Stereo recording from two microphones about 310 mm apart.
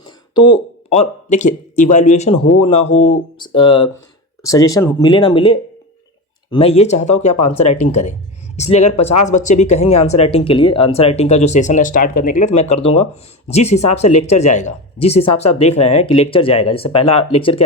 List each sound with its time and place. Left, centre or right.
0.3 s speech: centre